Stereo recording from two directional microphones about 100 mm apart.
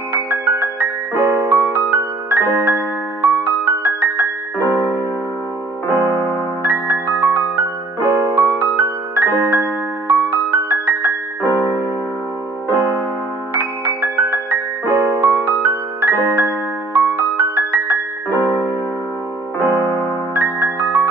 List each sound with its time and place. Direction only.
0.1 s music: 15° right (ahead or behind)
4.6 s music: 20° left (ahead or behind)
6.6 s music: 15° right (ahead or behind)
12.6 s music: 20° left (ahead or behind)
13.6 s music: 15° right (ahead or behind)
18.3 s music: 20° left (ahead or behind)
20.3 s music: 15° right (ahead or behind)